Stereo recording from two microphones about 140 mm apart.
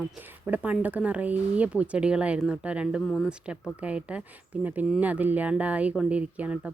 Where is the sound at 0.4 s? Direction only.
10° right (ahead or behind).